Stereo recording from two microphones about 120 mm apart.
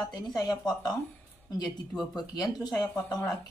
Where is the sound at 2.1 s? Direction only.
35° left (ahead or behind).